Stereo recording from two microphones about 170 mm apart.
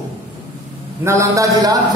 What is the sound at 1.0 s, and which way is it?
Mantra, 15° right (ahead or behind).